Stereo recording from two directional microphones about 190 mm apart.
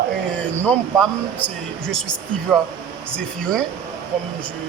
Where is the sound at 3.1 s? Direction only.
5° left (ahead or behind).